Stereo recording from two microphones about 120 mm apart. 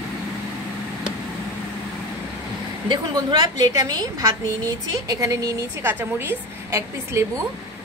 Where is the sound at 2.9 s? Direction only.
35° right (ahead or behind).